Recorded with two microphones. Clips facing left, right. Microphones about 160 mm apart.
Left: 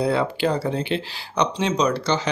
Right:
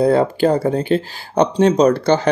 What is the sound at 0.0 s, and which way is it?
Speech, 45° right (ahead or behind).